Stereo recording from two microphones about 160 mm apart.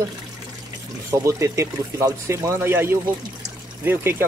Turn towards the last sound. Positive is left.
turn(degrees=-15)  # may be behind; listen again after turning